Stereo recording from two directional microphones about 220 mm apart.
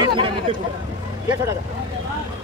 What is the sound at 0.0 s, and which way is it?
Speech, 25° right (ahead or behind).